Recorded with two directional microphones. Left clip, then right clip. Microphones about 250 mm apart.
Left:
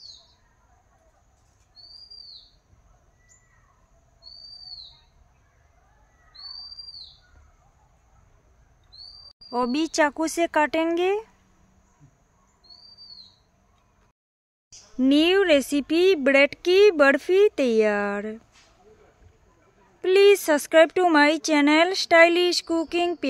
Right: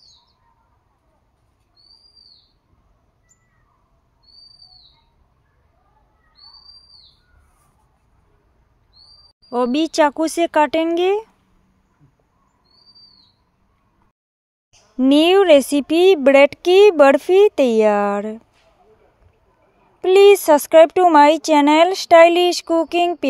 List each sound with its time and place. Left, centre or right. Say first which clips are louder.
9.5 s speech: right 6 dB; centre
15.0 s a woman's voice: right 7 dB; right
20.0 s speech: right 6 dB; centre